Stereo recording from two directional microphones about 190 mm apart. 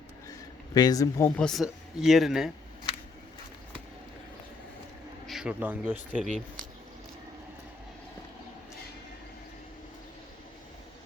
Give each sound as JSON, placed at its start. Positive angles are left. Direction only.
{"t": 0.3, "sound": "a sound", "side_deg": 20}
{"t": 1.4, "sound": "speech", "side_deg": 0}
{"t": 5.2, "sound": "speech", "side_deg": 0}
{"t": 6.2, "sound": "speech", "side_deg": -40}